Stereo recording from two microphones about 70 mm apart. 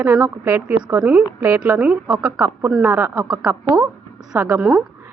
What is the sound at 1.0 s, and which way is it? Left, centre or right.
Speech, right.